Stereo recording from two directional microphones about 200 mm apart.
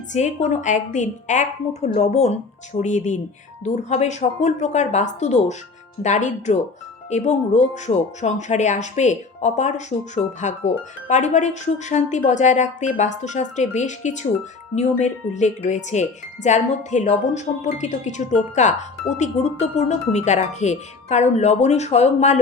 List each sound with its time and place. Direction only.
0.1 s speech: 35° left (ahead or behind)